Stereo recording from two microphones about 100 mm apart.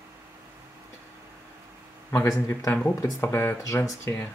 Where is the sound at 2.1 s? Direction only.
30° left (ahead or behind).